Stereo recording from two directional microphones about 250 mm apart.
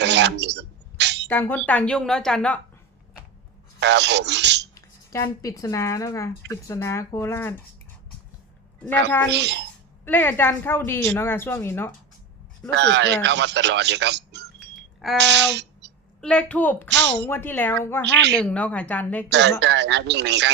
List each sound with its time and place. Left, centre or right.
0.0 s a sound: right
1.3 s a woman's voice: centre
3.8 s speech: right
4.7 s a woman's voice: centre
9.3 s speech: right
10.1 s a woman's voice: centre
12.7 s speech: right
15.2 s a sound: right
16.2 s a woman's voice: centre
19.3 s speech: right